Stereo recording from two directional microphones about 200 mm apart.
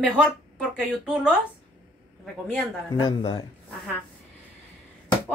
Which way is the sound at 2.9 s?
25° left (ahead or behind).